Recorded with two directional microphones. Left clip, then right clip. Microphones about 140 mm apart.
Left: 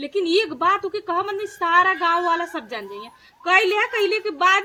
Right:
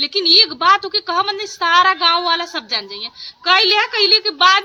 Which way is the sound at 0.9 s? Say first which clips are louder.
Right 6 dB; 10° right (ahead or behind).